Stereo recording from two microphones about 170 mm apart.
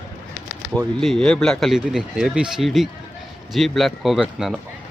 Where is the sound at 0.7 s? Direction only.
Centre (ahead or behind).